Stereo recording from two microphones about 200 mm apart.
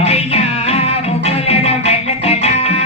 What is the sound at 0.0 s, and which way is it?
Music, 30° left (ahead or behind).